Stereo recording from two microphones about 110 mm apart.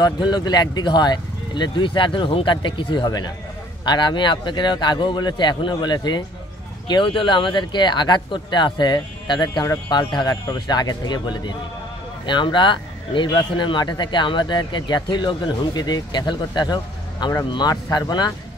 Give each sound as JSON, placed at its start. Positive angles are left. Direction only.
{"t": 0.0, "sound": "a man's voice", "side_deg": 40}